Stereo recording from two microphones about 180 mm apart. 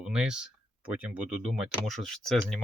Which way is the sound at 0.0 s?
5° right (ahead or behind).